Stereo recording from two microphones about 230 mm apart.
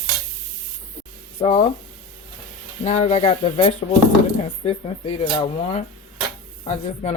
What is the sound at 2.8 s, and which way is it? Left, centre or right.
Speech, left.